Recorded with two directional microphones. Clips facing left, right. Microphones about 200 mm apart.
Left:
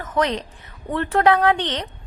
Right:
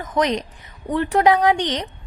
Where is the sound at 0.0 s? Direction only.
15° right (ahead or behind).